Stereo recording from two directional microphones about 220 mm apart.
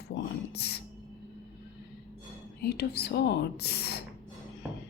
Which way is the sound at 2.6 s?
45° left (ahead or behind).